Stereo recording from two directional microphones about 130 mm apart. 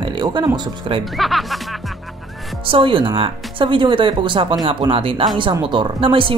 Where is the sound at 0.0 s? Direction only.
35° right (ahead or behind).